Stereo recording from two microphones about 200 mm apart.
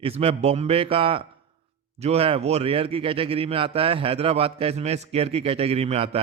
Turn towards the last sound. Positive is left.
turn(degrees=-30)  # may be behind; listen again after turning